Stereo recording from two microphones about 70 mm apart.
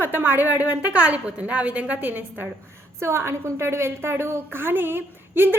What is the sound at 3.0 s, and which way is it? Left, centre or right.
A woman's voice, right.